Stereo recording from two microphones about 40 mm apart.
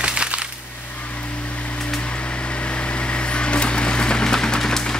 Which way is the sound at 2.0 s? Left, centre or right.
Left.